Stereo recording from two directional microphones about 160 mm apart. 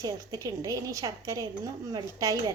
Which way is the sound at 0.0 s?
20° right (ahead or behind).